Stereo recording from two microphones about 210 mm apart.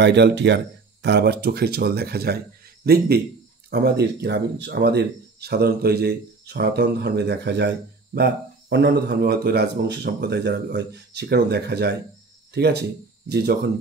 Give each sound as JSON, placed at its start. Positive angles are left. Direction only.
{"t": 0.0, "sound": "speech", "side_deg": -55}